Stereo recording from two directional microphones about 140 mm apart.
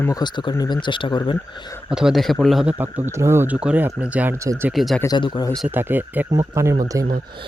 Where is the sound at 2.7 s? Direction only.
15° right (ahead or behind).